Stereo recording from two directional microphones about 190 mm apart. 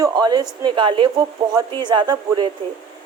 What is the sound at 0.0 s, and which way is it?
A woman's voice, 20° right (ahead or behind).